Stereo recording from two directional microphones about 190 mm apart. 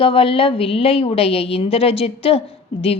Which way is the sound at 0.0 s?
30° left (ahead or behind).